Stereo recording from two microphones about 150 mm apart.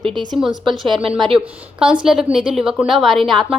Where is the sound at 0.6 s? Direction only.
Centre (ahead or behind).